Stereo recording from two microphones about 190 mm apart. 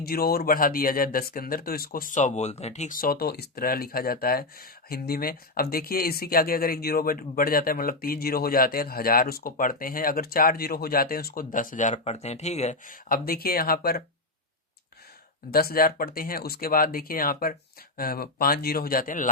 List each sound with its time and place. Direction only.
0.0 s speech: 55° left (ahead or behind)
15.5 s speech: 50° left (ahead or behind)